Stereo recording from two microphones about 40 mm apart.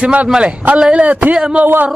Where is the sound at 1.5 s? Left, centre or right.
Right.